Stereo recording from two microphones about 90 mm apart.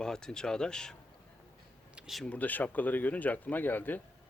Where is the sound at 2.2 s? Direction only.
15° left (ahead or behind).